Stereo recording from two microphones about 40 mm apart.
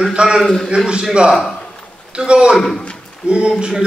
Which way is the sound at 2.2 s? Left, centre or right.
Right.